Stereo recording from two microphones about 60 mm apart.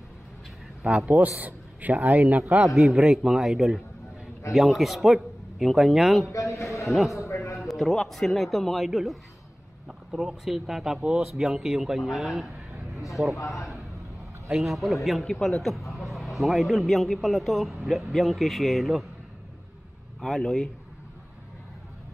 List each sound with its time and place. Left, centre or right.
0.8 s a man's voice: centre
2.1 s a man's voice: centre
6.2 s a sound: left
6.9 s a man's voice: centre
7.2 s a sound: left
7.5 s a man's voice: centre
13.6 s a sound: centre
14.6 s a man's voice: centre
20.2 s a man's voice: centre